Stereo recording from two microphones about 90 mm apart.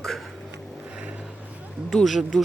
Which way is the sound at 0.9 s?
15° right (ahead or behind).